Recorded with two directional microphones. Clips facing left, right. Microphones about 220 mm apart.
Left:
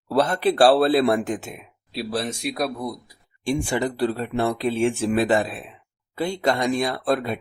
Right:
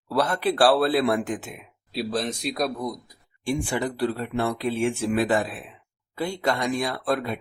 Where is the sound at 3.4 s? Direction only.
20° left (ahead or behind).